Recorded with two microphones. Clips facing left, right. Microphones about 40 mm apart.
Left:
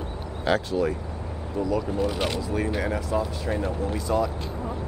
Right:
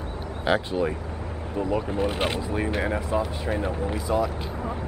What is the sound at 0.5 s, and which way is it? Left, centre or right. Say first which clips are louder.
Speech: even; right.